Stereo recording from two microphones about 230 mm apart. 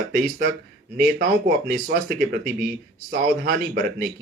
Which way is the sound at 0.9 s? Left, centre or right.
Right.